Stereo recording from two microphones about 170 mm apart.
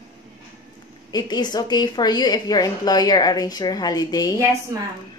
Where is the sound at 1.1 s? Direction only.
25° left (ahead or behind).